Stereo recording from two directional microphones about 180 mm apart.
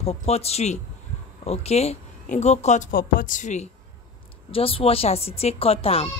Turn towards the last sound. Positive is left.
turn(degrees=30)  # may be behind; listen again after turning